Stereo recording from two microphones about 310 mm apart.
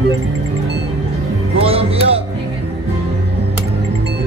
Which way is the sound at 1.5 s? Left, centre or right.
Centre.